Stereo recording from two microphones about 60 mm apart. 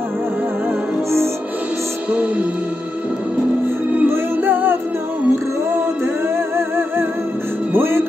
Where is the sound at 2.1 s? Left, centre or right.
Right.